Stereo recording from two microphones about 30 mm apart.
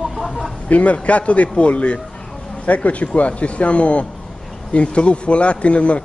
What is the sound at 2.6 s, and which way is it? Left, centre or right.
Speech, left.